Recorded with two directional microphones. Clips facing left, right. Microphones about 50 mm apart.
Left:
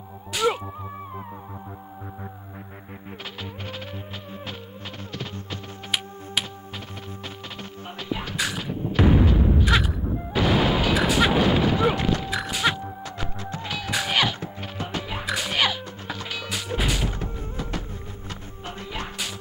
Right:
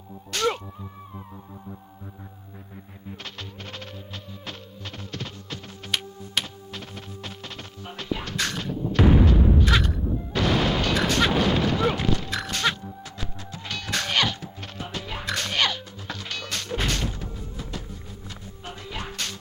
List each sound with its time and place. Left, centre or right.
0.3 s music: centre
3.6 s music: centre
5.2 s music: centre
8.0 s music: centre
8.9 s a sound: centre
13.7 s music: centre
17.1 s music: left
17.6 s a sound: left
18.9 s music: centre